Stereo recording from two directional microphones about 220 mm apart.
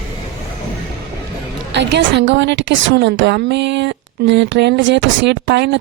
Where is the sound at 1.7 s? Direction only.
55° right (ahead or behind).